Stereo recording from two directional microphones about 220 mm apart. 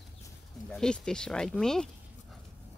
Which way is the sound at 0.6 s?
5° left (ahead or behind).